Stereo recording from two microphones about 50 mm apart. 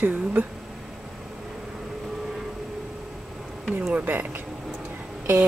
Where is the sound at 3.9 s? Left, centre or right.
Right.